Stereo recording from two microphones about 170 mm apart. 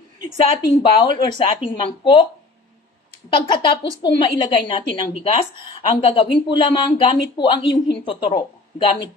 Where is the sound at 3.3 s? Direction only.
30° left (ahead or behind).